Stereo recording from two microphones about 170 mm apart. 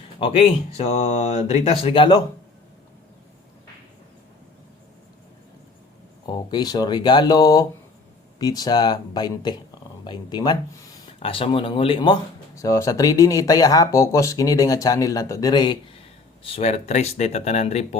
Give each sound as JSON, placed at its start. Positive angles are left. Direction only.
{"t": 0.2, "sound": "speech", "side_deg": 35}
{"t": 6.2, "sound": "speech", "side_deg": 25}
{"t": 16.4, "sound": "speech", "side_deg": 35}